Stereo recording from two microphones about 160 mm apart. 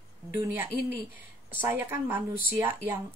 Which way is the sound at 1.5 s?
15° right (ahead or behind).